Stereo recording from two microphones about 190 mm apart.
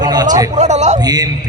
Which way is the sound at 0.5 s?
35° right (ahead or behind).